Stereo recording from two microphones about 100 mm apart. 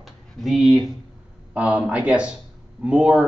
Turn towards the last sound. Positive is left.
turn(degrees=-10)  # may be behind; listen again after turning